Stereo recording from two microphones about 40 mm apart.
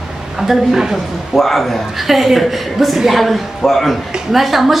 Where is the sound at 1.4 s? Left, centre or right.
Centre.